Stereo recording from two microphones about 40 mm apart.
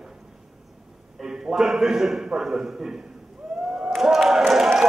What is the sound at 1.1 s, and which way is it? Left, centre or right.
A man's voice, centre.